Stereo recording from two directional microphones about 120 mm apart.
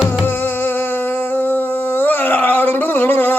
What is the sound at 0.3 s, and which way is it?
Humming, 15° left (ahead or behind).